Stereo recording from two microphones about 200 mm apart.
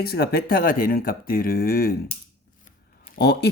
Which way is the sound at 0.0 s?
50° left (ahead or behind).